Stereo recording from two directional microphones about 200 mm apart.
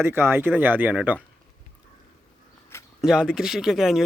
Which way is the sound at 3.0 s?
5° right (ahead or behind).